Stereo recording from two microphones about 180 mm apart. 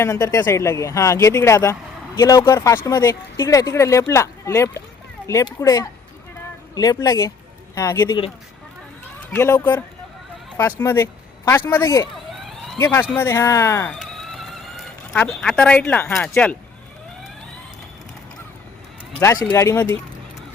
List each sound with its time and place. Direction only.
0.0 s speech: 20° left (ahead or behind)
9.3 s speech: 15° left (ahead or behind)
14.0 s a sound: centre (ahead or behind)
19.2 s speech: 20° left (ahead or behind)